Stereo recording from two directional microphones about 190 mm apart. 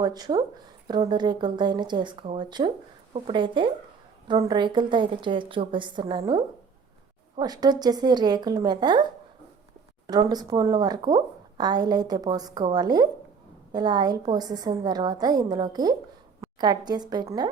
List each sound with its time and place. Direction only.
0.0 s a woman's voice: 20° right (ahead or behind)
10.1 s a woman's voice: 20° right (ahead or behind)